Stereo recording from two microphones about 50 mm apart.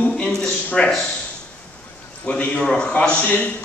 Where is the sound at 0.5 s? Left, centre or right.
Left.